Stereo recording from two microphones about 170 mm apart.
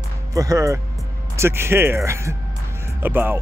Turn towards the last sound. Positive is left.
turn(degrees=-10)  # may be behind; listen again after turning